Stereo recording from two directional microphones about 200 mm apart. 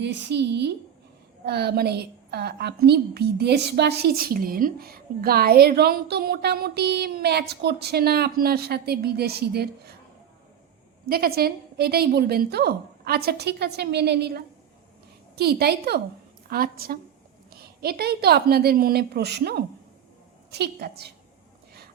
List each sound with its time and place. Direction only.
0.0 s a woman's voice: 60° right (ahead or behind)
11.1 s a woman's voice: 50° right (ahead or behind)